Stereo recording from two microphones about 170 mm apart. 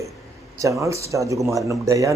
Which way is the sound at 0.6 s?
20° right (ahead or behind).